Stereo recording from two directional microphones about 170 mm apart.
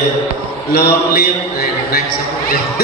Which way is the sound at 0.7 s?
65° left (ahead or behind).